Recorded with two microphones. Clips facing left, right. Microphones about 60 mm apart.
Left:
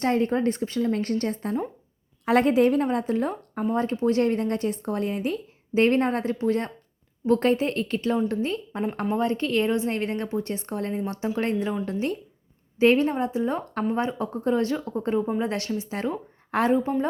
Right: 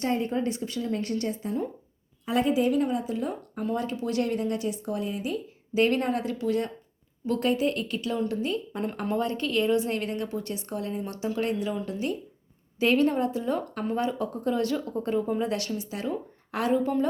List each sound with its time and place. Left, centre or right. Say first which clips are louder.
0.0 s a woman's voice: left 4 dB; left
3.8 s a woman's voice: left 7 dB; left